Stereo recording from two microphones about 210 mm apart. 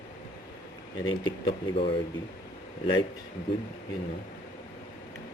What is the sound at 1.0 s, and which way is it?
Speech, 20° left (ahead or behind).